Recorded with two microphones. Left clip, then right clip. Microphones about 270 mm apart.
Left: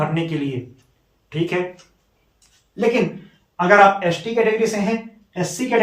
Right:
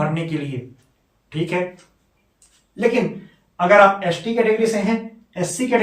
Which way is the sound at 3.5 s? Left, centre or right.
Centre.